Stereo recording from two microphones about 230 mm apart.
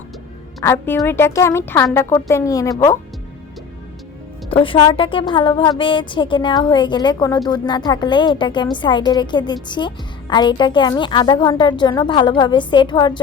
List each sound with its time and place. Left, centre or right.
0.6 s a woman's voice: centre
4.4 s a woman's voice: left